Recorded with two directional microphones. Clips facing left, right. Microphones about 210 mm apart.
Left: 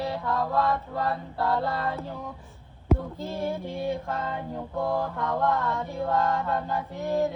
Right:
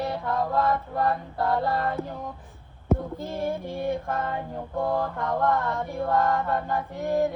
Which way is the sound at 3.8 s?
55° right (ahead or behind).